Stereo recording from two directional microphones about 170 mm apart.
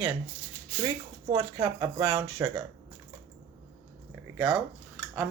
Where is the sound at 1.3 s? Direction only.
25° right (ahead or behind).